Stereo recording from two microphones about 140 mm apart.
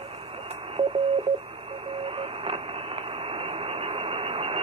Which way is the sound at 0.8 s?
40° right (ahead or behind).